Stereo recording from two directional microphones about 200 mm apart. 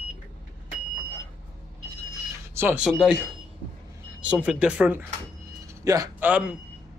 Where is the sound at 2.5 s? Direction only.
5° right (ahead or behind).